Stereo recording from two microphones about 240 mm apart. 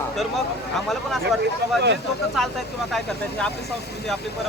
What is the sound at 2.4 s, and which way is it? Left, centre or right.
Speech, centre.